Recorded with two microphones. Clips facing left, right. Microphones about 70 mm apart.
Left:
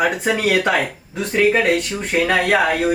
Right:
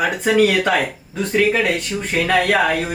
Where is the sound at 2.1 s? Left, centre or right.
Centre.